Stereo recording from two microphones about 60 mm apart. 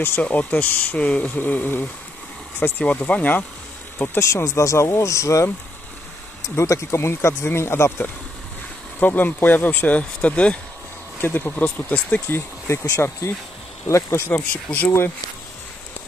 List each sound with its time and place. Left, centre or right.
0.0 s speech: left
4.1 s speech: left
9.0 s speech: left
11.1 s speech: left
12.3 s speech: left
14.3 s speech: left